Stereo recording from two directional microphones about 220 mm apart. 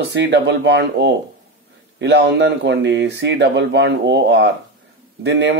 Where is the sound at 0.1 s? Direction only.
55° right (ahead or behind).